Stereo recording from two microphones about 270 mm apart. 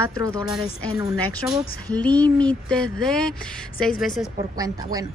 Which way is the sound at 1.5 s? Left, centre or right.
Centre.